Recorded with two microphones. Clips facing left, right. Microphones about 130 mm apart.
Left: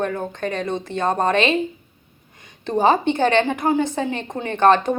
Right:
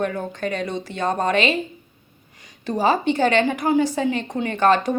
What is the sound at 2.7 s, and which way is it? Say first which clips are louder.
A woman's voice: left 2 dB; 25° left (ahead or behind).